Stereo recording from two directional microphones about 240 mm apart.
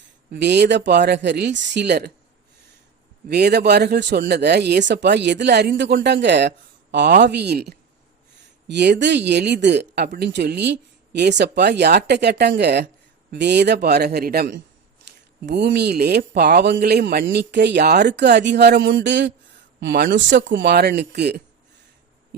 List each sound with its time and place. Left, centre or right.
0.3 s speech: right
3.2 s speech: right
15.1 s a sound: right
15.4 s speech: right